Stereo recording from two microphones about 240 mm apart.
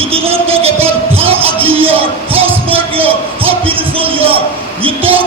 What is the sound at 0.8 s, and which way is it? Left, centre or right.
Music, right.